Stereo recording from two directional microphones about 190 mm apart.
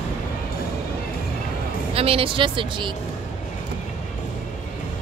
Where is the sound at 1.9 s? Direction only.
30° right (ahead or behind).